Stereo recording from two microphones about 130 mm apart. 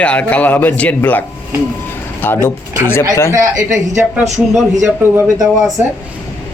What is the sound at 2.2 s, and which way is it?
Speech, 15° left (ahead or behind).